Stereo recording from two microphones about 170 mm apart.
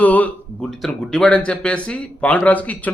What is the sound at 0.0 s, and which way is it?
A man's voice, 10° left (ahead or behind).